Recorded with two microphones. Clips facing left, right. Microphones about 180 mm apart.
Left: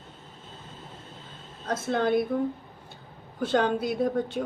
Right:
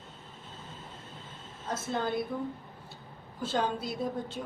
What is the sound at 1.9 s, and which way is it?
Speech, 70° left (ahead or behind).